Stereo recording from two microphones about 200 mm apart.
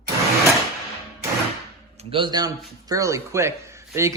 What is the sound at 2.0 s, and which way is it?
Speech, 25° right (ahead or behind).